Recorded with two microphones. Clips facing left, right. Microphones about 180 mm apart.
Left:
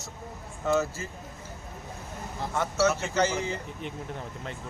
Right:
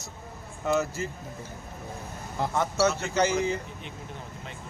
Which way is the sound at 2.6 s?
15° right (ahead or behind).